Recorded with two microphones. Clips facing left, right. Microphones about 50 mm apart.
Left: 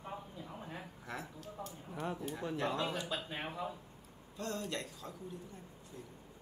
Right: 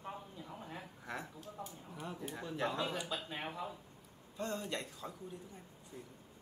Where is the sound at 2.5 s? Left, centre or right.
Centre.